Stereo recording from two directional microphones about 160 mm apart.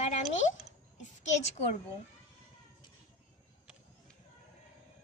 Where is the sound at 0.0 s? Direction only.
45° left (ahead or behind).